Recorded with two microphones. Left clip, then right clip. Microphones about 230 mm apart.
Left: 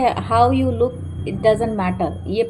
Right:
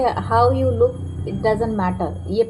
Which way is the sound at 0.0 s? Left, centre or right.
Left.